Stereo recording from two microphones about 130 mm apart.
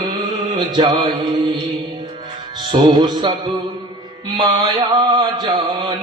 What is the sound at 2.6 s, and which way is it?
Speech, 35° right (ahead or behind).